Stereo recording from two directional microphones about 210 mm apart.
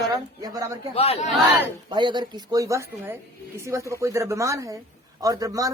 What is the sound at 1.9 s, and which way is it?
A man's voice, 20° right (ahead or behind).